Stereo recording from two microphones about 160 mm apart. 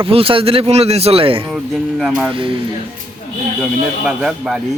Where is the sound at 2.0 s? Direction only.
5° right (ahead or behind).